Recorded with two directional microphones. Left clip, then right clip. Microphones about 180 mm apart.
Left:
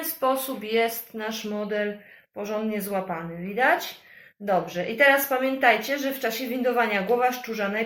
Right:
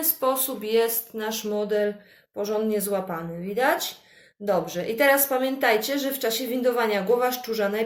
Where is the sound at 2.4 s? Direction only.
45° right (ahead or behind).